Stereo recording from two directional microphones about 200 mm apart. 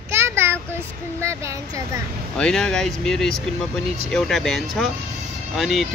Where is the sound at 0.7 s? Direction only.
15° right (ahead or behind).